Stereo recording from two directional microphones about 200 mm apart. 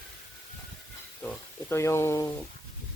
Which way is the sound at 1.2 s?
10° left (ahead or behind).